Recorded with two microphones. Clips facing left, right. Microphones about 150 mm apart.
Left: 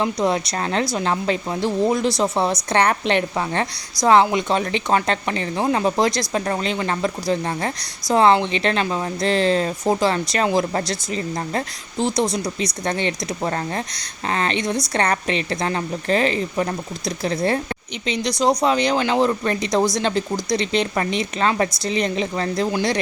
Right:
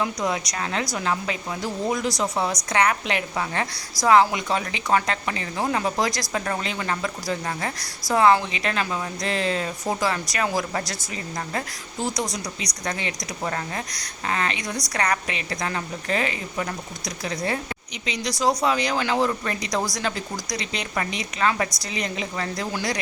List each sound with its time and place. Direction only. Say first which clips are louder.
0.0 s speech: left 5 dB; 30° left (ahead or behind)
18.0 s speech: left 4 dB; 25° left (ahead or behind)